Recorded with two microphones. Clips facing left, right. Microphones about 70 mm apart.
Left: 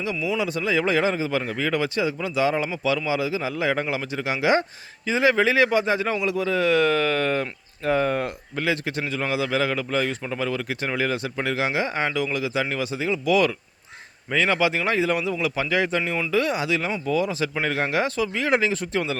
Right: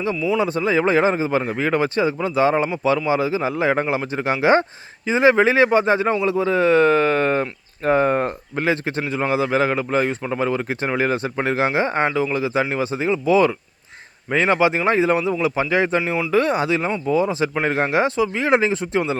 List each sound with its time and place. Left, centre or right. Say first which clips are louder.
0.3 s a man's voice: right 5 dB; right